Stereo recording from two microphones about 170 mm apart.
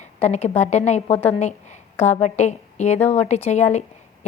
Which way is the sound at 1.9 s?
45° left (ahead or behind).